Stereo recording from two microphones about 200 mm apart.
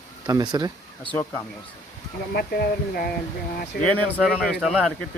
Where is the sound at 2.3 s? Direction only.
50° left (ahead or behind).